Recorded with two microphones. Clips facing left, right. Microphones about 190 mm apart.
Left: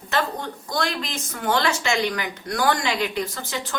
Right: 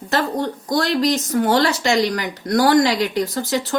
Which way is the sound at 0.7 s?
35° right (ahead or behind).